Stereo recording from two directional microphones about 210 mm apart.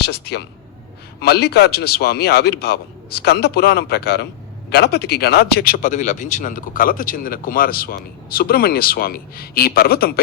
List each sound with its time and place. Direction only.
0.0 s speech: 50° left (ahead or behind)